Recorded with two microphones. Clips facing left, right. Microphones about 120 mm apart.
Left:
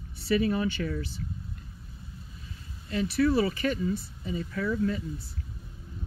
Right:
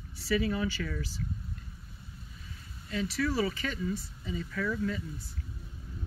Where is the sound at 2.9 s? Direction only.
25° left (ahead or behind).